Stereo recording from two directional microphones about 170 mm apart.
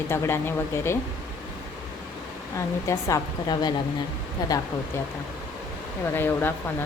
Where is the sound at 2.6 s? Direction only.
15° left (ahead or behind).